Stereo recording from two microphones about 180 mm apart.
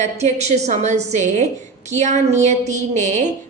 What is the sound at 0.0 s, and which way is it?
A woman's voice, 40° right (ahead or behind).